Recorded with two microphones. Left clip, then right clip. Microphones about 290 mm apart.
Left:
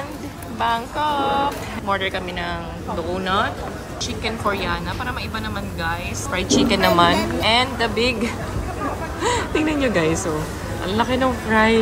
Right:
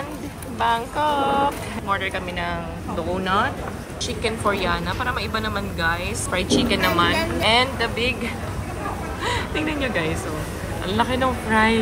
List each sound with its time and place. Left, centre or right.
0.6 s a woman's voice: centre
4.2 s a woman's voice: centre